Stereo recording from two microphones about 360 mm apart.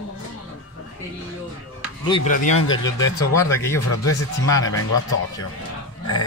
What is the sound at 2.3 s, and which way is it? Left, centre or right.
Speech, left.